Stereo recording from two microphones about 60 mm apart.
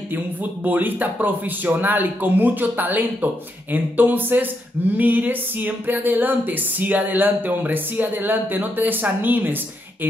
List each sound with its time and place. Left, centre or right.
0.1 s speech: right